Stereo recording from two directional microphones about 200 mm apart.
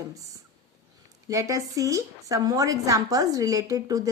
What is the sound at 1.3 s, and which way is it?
A woman's voice, 15° right (ahead or behind).